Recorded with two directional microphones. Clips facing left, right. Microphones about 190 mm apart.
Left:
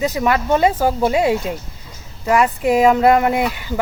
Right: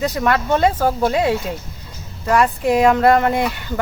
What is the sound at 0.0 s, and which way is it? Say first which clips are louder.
Speech: left 1 dB; 5° left (ahead or behind).